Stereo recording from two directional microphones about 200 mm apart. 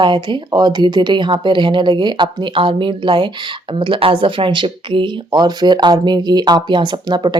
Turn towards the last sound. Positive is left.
turn(degrees=-20)  # may be behind; listen again after turning